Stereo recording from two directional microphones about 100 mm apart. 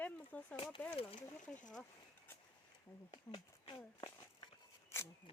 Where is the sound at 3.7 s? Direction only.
40° left (ahead or behind).